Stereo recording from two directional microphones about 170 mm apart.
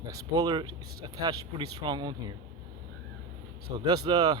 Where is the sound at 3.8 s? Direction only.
25° right (ahead or behind).